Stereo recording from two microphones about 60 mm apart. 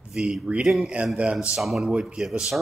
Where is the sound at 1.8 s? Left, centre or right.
Centre.